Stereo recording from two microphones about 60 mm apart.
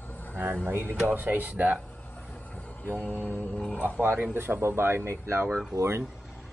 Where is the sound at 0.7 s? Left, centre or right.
Right.